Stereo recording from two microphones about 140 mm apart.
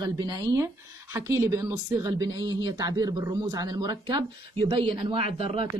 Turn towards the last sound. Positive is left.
turn(degrees=-45)  # may be behind; listen again after turning